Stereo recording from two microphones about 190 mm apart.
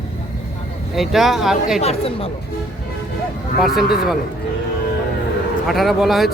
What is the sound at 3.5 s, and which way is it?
Speech, centre (ahead or behind).